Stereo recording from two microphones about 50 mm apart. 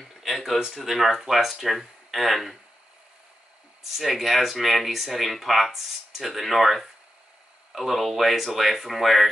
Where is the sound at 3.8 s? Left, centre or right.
Centre.